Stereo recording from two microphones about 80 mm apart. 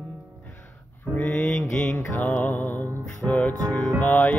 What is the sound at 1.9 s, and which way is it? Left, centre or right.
Music, left.